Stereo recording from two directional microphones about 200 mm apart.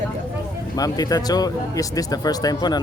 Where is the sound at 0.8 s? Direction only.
20° left (ahead or behind).